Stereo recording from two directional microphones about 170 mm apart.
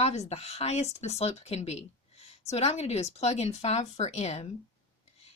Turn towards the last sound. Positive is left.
turn(degrees=40)  # may be behind; listen again after turning